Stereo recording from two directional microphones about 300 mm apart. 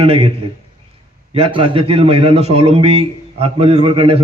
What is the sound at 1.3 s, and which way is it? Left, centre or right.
A man's voice, centre.